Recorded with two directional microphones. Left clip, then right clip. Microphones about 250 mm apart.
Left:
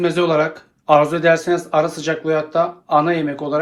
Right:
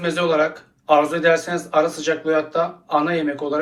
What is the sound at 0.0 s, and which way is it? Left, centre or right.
Speech, left.